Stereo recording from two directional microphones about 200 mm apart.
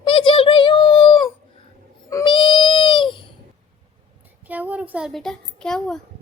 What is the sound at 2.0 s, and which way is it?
Baby cry, 20° left (ahead or behind).